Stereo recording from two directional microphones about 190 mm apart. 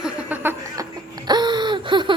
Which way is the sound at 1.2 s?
20° right (ahead or behind).